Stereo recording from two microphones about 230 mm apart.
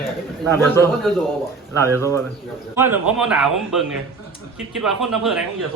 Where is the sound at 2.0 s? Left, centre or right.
Centre.